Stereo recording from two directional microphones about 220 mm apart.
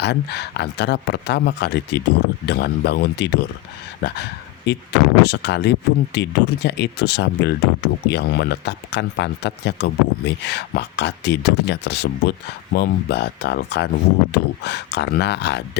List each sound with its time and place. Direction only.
0.0 s speech: 50° left (ahead or behind)